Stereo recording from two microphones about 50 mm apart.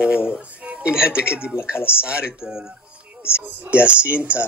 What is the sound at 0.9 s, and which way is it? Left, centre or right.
Speech, centre.